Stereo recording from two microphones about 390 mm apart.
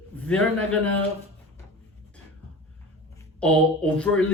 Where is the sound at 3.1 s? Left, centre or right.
Centre.